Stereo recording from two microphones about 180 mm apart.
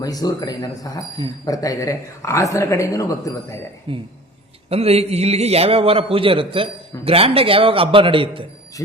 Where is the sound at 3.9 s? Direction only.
30° right (ahead or behind).